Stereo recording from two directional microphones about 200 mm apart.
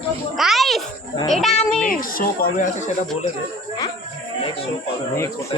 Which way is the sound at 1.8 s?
45° left (ahead or behind).